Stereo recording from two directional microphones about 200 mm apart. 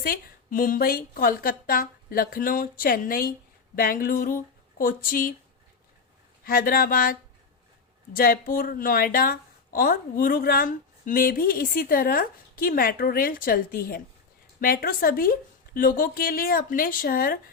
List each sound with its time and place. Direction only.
0.0 s a woman's voice: 45° left (ahead or behind)
6.4 s a woman's voice: 45° left (ahead or behind)